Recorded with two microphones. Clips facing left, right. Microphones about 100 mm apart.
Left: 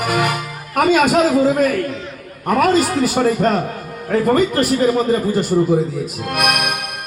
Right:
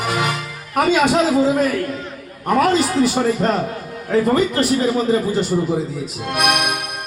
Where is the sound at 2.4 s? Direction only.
5° left (ahead or behind).